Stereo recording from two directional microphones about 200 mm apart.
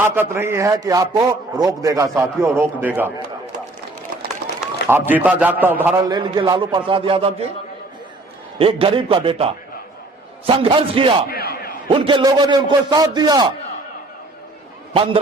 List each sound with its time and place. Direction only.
0.0 s a man's voice: 10° right (ahead or behind)
4.9 s a man's voice: 10° right (ahead or behind)
6.1 s a man's voice: 20° right (ahead or behind)
8.5 s a man's voice: 30° right (ahead or behind)
11.3 s a man's voice: 50° left (ahead or behind)
11.9 s a man's voice: 25° right (ahead or behind)
14.9 s a man's voice: 25° right (ahead or behind)